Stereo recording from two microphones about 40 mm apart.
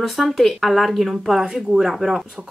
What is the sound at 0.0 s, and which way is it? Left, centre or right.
Speech, centre.